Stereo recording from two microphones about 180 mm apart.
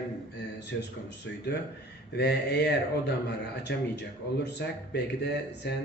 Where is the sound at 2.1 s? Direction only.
65° left (ahead or behind).